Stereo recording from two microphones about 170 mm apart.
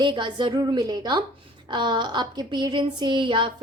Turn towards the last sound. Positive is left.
turn(degrees=-30)  # may be behind; listen again after turning